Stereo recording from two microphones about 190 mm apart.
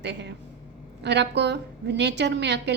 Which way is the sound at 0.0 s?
65° right (ahead or behind).